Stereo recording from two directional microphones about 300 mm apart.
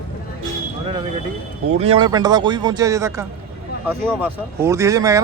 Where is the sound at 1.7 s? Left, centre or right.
Centre.